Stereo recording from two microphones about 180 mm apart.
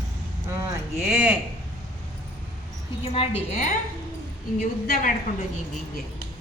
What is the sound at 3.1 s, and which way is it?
Speech, 35° left (ahead or behind).